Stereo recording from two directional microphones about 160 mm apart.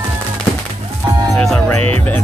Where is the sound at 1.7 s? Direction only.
35° right (ahead or behind).